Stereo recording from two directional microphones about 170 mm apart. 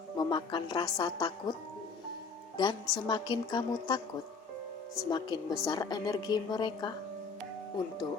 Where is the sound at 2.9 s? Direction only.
25° left (ahead or behind).